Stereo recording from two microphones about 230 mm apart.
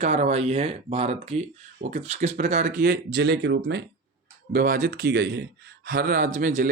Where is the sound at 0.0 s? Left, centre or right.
Right.